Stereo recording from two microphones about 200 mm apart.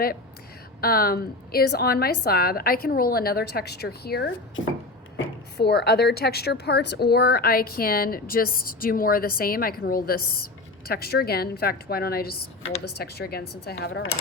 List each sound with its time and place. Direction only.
0.8 s a woman's voice: 50° left (ahead or behind)
5.1 s a woman's voice: 65° left (ahead or behind)